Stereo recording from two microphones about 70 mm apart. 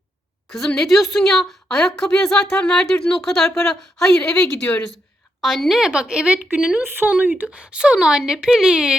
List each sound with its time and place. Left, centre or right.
0.8 s a woman's voice: centre
5.4 s speech: centre
6.8 s speech: right; by 9.0 s centre